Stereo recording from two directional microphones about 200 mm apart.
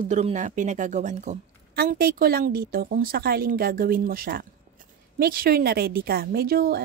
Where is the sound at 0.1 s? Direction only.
35° right (ahead or behind).